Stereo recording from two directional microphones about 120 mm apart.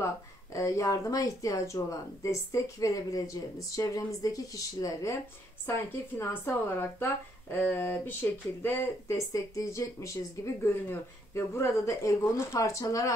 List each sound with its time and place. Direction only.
0.0 s speech: 25° left (ahead or behind)